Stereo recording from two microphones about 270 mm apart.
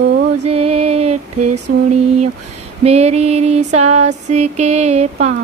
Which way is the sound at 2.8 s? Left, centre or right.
Right.